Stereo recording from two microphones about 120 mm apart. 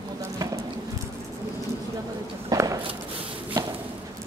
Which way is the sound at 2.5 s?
30° right (ahead or behind).